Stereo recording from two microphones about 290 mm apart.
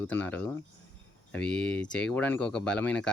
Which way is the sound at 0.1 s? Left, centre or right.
Centre.